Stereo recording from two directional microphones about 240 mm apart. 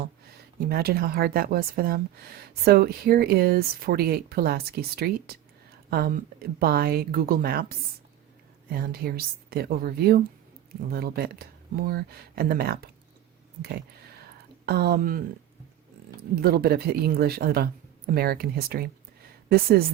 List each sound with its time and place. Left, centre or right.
0.7 s speech: right
14.7 s speech: right
16.3 s speech: right